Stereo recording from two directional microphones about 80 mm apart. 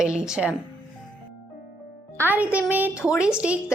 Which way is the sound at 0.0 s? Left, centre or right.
Centre.